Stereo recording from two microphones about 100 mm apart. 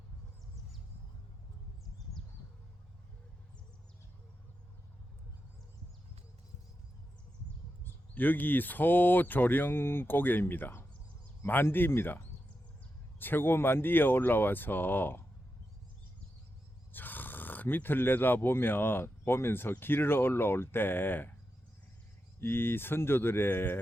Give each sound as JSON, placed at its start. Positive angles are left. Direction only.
{"t": 8.1, "sound": "speech", "side_deg": 20}
{"t": 16.9, "sound": "speech", "side_deg": 20}
{"t": 22.4, "sound": "speech", "side_deg": 20}